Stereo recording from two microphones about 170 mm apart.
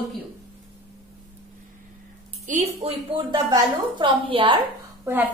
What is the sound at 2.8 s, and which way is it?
A woman's voice, 25° right (ahead or behind).